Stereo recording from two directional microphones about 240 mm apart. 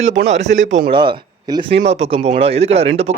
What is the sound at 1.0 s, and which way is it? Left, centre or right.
Speech, centre.